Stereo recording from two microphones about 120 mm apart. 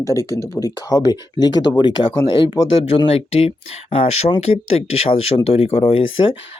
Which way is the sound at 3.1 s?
60° left (ahead or behind).